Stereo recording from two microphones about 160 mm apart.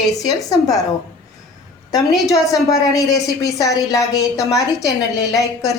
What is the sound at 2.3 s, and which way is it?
A woman's voice, 20° left (ahead or behind).